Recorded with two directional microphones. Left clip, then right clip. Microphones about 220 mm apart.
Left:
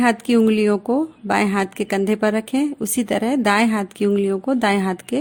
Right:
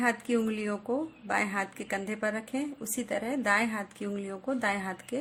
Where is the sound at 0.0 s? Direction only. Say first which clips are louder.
Left 12 dB; 40° left (ahead or behind).